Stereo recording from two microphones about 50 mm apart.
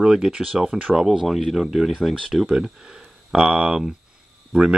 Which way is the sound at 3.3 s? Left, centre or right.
Centre.